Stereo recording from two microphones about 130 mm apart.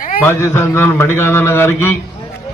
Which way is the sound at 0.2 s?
20° left (ahead or behind).